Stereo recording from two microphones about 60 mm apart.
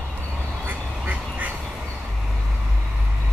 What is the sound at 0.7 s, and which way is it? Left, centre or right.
Duck, right.